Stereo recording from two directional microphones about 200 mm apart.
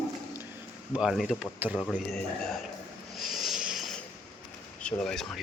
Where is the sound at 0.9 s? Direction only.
Centre (ahead or behind).